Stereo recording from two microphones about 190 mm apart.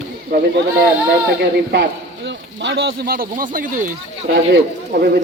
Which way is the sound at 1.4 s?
60° right (ahead or behind).